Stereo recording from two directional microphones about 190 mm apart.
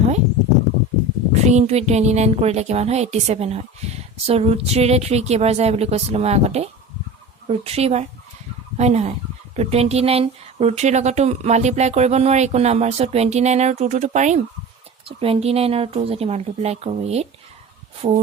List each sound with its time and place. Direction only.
1.3 s speech: 35° right (ahead or behind)